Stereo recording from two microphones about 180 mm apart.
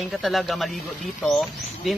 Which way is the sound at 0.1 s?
Centre (ahead or behind).